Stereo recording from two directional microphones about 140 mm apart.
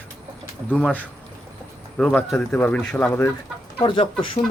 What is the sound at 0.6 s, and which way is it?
Speech, 10° left (ahead or behind).